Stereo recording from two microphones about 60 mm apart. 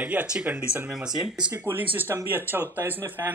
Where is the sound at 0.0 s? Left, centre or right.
Right; by 1.5 s centre.